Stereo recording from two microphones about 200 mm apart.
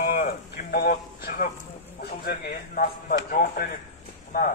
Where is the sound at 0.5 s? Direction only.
50° left (ahead or behind).